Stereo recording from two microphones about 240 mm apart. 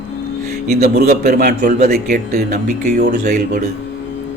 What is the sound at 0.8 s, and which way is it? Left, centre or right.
A man's voice, right.